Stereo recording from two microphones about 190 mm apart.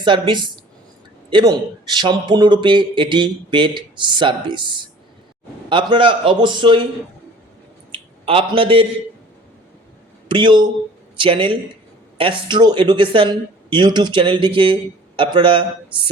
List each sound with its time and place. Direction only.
0.0 s a man's voice: 25° right (ahead or behind)
7.9 s a man's voice: 25° right (ahead or behind)
10.2 s a man's voice: 25° right (ahead or behind)